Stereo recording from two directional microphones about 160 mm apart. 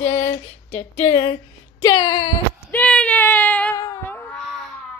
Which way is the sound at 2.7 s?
5° left (ahead or behind).